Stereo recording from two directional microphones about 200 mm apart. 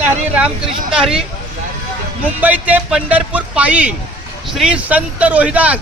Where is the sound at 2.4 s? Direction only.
10° right (ahead or behind).